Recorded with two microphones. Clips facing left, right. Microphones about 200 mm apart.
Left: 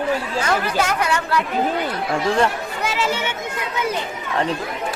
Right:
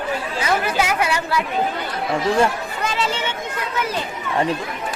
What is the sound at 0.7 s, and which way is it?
Speech, 10° right (ahead or behind).